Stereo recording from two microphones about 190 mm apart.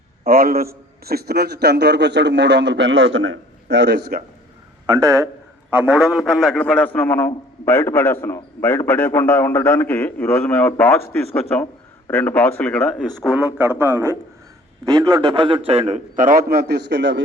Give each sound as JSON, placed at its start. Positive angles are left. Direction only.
{"t": 0.3, "sound": "a man's voice", "side_deg": -50}
{"t": 4.9, "sound": "a man's voice", "side_deg": -20}
{"t": 5.7, "sound": "a man's voice", "side_deg": -5}